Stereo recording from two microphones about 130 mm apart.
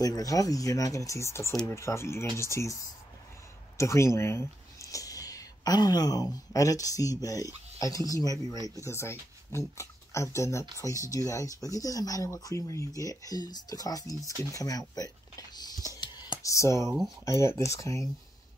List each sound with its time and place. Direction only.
0.0 s speech: 25° left (ahead or behind)
16.0 s music: 35° left (ahead or behind)
16.4 s speech: 25° left (ahead or behind)